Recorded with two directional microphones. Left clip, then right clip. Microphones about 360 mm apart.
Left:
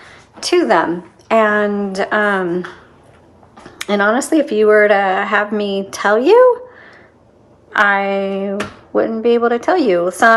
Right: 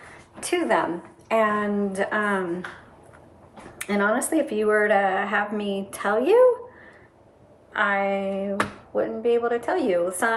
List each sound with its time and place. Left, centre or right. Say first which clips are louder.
0.3 s a woman's voice: left 9 dB; centre
3.8 s speech: left 8 dB; centre
7.7 s speech: left 9 dB; centre